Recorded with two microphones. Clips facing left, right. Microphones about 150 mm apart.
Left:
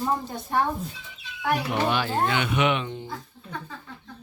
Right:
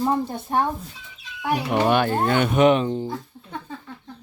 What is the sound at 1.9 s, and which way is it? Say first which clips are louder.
Speech: right 6 dB; 55° right (ahead or behind).